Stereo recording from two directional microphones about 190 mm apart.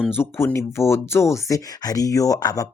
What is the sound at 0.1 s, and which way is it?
Speech, 10° left (ahead or behind).